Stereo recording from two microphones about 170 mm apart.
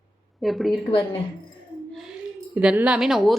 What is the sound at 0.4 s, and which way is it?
Speech, centre (ahead or behind).